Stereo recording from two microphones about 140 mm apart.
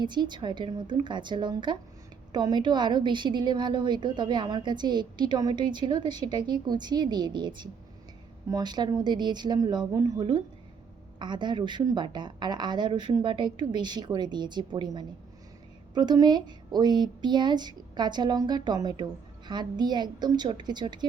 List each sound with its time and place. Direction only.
0.0 s a woman's voice: 30° right (ahead or behind)